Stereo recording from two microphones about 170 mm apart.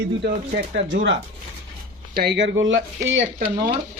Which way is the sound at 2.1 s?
70° right (ahead or behind).